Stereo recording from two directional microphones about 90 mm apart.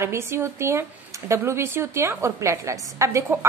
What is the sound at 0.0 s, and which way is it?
A woman's voice, 30° right (ahead or behind).